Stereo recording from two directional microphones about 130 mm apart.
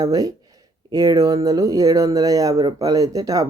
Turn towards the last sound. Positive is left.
turn(degrees=-25)  # may be behind; listen again after turning